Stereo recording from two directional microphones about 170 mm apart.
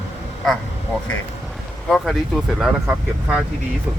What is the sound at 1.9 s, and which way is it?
Speech, centre (ahead or behind).